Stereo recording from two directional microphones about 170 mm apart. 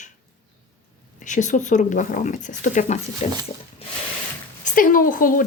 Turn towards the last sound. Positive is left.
turn(degrees=55)  # may be behind; listen again after turning